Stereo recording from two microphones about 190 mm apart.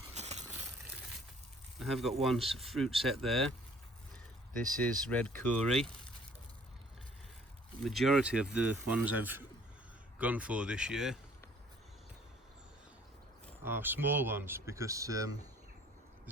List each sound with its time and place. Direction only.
0.1 s a sound: 35° right (ahead or behind)
1.8 s speech: centre (ahead or behind)
4.8 s speech: 5° left (ahead or behind)
7.9 s speech: centre (ahead or behind)
13.7 s speech: 10° right (ahead or behind)